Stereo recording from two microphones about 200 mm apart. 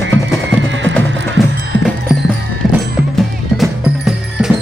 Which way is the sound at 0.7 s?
65° right (ahead or behind).